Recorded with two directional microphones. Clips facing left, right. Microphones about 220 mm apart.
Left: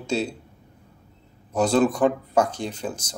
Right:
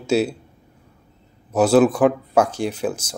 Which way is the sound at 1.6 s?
5° right (ahead or behind).